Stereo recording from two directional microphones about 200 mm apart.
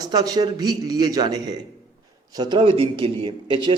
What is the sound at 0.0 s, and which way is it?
A man's voice, 20° right (ahead or behind).